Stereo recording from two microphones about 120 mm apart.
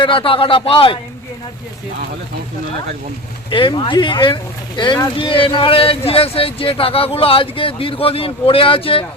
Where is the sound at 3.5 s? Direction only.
45° left (ahead or behind).